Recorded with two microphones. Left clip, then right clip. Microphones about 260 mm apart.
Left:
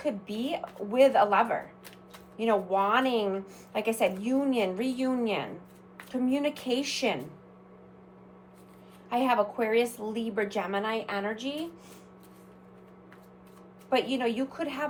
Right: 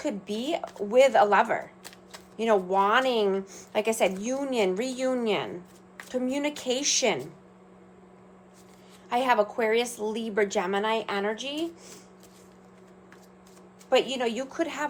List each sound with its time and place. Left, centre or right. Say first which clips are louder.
0.0 s a woman's voice: right 1 dB; right
9.0 s a woman's voice: right 2 dB; right
13.9 s a woman's voice: right 3 dB; right